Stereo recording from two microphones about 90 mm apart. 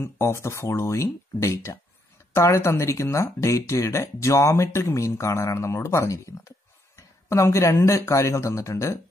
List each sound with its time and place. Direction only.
0.0 s speech: 30° left (ahead or behind)